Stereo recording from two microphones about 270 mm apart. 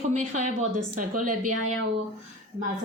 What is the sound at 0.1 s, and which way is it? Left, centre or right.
Speech, right.